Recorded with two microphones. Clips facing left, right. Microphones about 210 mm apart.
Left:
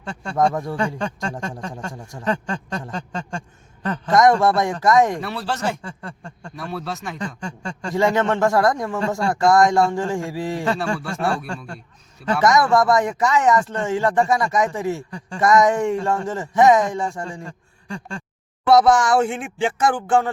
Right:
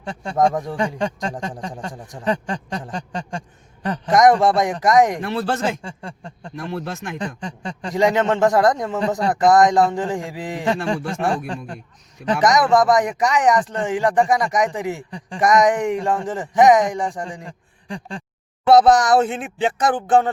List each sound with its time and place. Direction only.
0.0 s a man's voice: 15° right (ahead or behind)